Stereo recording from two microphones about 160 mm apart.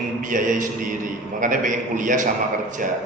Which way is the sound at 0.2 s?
55° right (ahead or behind).